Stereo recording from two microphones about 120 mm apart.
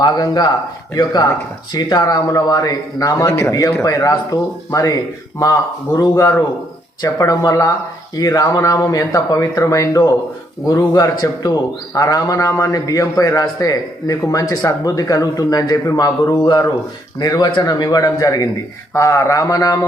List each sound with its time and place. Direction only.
0.0 s a man's voice: 35° left (ahead or behind)